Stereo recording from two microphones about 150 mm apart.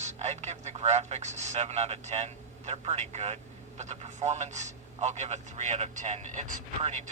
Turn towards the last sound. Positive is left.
turn(degrees=-50)  # may be behind; listen again after turning